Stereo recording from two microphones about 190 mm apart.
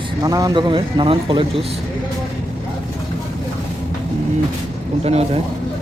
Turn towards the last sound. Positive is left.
turn(degrees=-35)  # may be behind; listen again after turning